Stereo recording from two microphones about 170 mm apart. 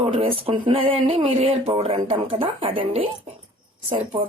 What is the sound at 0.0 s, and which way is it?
Speech, 30° right (ahead or behind).